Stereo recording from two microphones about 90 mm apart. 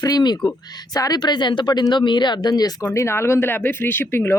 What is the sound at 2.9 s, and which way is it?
Speech, 30° left (ahead or behind).